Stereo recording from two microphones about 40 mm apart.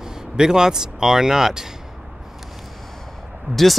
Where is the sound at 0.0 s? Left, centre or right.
Centre.